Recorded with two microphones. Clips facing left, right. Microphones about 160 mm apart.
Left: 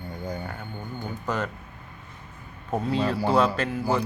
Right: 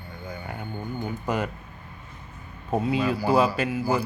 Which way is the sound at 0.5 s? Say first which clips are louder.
Right 3 dB; 10° right (ahead or behind).